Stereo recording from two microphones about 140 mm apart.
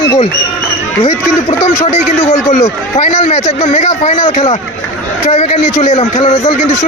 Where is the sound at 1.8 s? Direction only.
50° left (ahead or behind).